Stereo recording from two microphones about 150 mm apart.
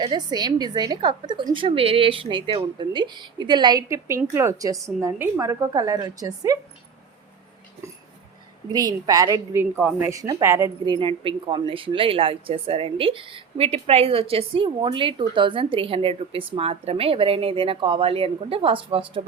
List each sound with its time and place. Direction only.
0.0 s a woman's voice: 30° right (ahead or behind)
8.7 s a woman's voice: 25° right (ahead or behind)
10.8 s speech: 35° right (ahead or behind)